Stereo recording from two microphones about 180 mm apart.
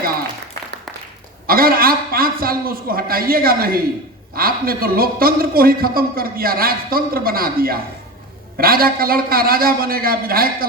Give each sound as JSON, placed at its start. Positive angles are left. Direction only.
{"t": 1.5, "sound": "a man's voice", "side_deg": -55}